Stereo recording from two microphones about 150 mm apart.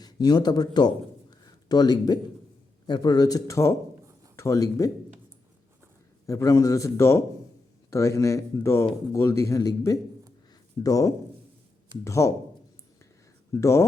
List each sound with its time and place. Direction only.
0.0 s speech: 25° left (ahead or behind)
1.5 s a sound: 25° left (ahead or behind)
2.8 s speech: 30° left (ahead or behind)
6.2 s speech: 20° left (ahead or behind)
13.5 s speech: 20° left (ahead or behind)